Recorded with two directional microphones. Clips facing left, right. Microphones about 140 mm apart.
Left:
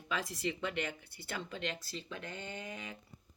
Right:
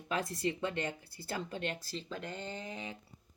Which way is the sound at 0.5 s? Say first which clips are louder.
Right 2 dB; 30° right (ahead or behind).